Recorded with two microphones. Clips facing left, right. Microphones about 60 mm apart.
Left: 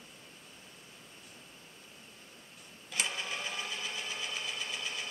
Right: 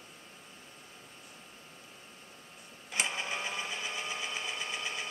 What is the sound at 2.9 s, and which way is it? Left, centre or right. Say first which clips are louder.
Engine: right 2 dB; right.